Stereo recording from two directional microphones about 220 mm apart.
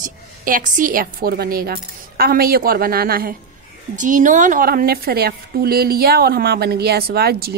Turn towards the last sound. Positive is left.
turn(degrees=-45)  # may be behind; listen again after turning